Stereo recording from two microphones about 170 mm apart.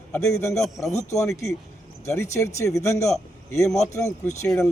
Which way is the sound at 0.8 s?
Centre (ahead or behind).